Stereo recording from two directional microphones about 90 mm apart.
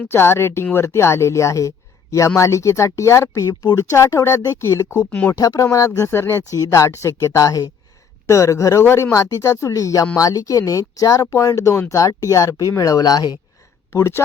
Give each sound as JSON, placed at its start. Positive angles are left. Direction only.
{"t": 0.1, "sound": "speech", "side_deg": 30}
{"t": 13.9, "sound": "speech", "side_deg": 30}